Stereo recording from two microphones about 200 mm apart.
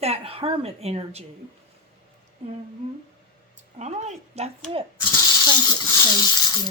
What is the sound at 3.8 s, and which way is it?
Speech, 35° right (ahead or behind).